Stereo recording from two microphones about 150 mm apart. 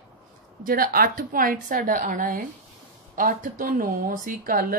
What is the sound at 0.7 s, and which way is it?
A woman's voice, 80° right.